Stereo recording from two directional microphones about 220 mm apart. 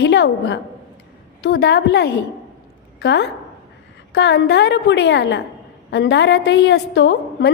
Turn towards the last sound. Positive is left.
turn(degrees=50)  # may be behind; listen again after turning